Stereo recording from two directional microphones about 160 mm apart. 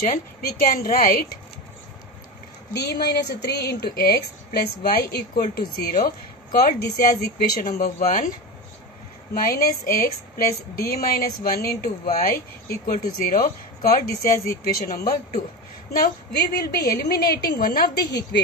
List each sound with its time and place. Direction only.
0.0 s a woman's voice: 65° left (ahead or behind)
2.7 s a woman's voice: 90° left; by 7.7 s 70° left (ahead or behind)
7.8 s a woman's voice: 60° left (ahead or behind)
16.6 s a woman's voice: 75° left (ahead or behind)